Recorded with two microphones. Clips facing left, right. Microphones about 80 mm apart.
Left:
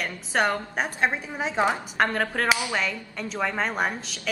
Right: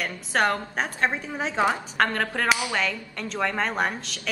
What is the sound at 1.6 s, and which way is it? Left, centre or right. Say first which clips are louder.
Speech: even; left.